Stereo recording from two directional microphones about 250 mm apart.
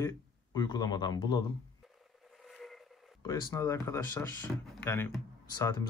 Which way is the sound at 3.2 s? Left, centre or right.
Centre.